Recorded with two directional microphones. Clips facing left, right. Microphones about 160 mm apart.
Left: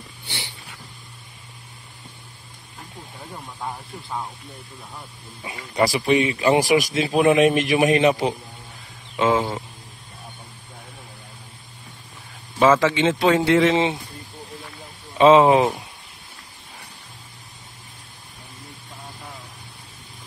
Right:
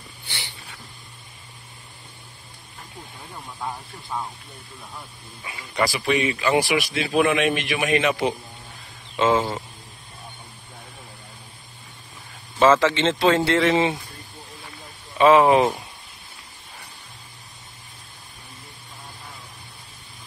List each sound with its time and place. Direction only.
3.6 s speech: centre (ahead or behind)
5.4 s speech: 30° left (ahead or behind)
9.1 s speech: 10° left (ahead or behind)
12.5 s speech: 10° left (ahead or behind)
15.1 s speech: 20° left (ahead or behind)